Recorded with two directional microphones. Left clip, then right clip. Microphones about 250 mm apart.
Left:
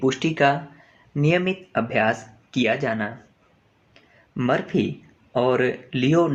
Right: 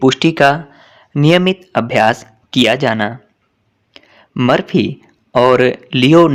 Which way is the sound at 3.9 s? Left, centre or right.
Right.